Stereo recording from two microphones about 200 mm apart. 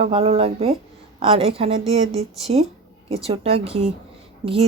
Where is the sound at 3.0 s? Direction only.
30° right (ahead or behind).